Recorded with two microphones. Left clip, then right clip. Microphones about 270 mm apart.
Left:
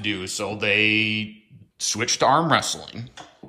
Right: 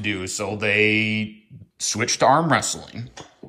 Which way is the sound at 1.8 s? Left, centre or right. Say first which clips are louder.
Right 2 dB; centre.